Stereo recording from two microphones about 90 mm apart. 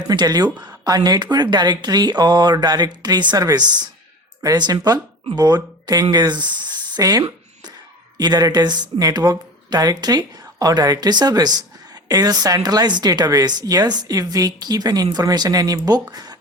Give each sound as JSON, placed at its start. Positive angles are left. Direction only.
{"t": 0.1, "sound": "a woman's voice", "side_deg": -45}